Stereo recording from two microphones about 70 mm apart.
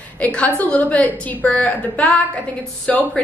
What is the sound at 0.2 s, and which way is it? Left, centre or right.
A woman's voice, centre.